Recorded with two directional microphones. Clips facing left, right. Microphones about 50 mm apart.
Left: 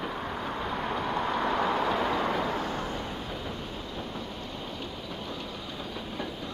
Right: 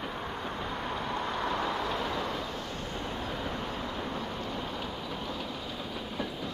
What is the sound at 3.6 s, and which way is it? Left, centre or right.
Vehicle, right.